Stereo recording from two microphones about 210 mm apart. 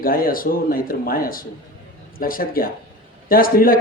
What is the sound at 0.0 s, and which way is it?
A man's voice, 45° left (ahead or behind).